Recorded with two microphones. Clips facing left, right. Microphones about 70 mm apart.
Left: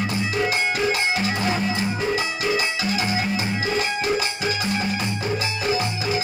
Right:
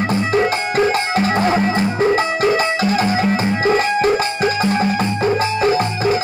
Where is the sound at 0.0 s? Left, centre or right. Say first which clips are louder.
Right 7 dB; right.